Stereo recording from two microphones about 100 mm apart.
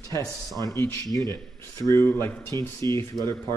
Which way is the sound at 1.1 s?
30° left (ahead or behind).